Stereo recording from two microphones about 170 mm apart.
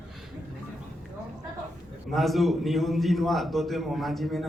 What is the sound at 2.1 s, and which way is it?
A man's voice, centre (ahead or behind).